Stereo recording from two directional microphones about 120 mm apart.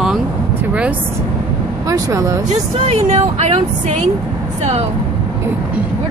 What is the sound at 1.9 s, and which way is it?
Speech, 30° right (ahead or behind).